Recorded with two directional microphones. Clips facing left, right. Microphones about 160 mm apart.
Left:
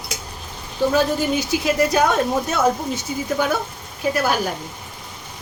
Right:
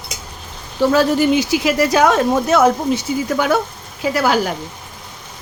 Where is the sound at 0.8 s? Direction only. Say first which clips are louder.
Right 5 dB; 80° right.